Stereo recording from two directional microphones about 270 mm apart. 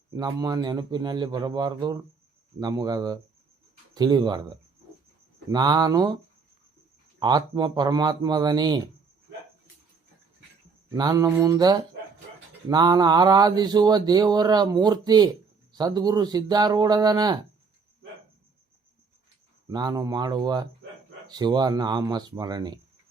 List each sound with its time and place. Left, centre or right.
0.1 s speech: centre
7.2 s speech: centre
10.9 s speech: centre
19.6 s speech: centre